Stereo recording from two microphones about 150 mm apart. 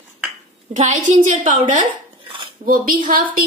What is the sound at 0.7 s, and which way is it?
A woman's voice, 55° right (ahead or behind).